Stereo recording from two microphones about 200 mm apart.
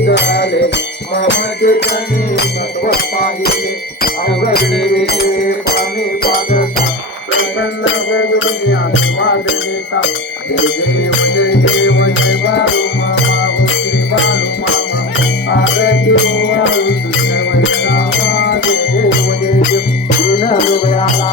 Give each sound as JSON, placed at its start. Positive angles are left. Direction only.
{"t": 0.0, "sound": "music", "side_deg": 60}
{"t": 1.6, "sound": "music", "side_deg": 50}
{"t": 4.0, "sound": "music", "side_deg": 50}
{"t": 8.1, "sound": "a sound", "side_deg": 65}
{"t": 11.2, "sound": "music", "side_deg": 70}
{"t": 15.4, "sound": "music", "side_deg": 75}
{"t": 20.3, "sound": "music", "side_deg": 35}